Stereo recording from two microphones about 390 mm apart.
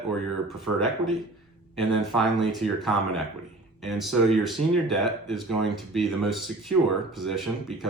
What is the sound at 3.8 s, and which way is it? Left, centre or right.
Speech, centre.